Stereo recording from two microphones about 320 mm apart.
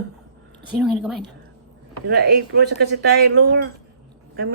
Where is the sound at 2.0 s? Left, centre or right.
Right.